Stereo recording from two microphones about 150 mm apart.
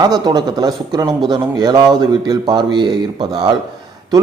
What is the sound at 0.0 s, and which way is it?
Speech, 25° right (ahead or behind).